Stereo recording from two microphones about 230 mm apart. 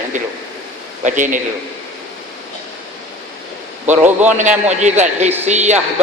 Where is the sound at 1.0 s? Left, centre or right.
Right.